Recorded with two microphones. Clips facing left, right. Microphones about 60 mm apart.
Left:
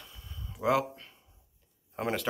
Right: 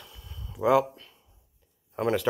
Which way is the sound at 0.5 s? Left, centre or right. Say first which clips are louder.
Right 5 dB; centre.